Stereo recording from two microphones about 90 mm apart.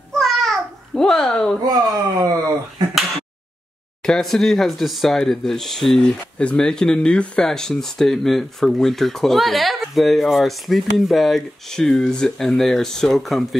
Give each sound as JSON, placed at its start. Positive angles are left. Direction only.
{"t": 0.1, "sound": "babbling", "side_deg": 0}
{"t": 1.6, "sound": "speech", "side_deg": -45}
{"t": 4.0, "sound": "speech", "side_deg": 5}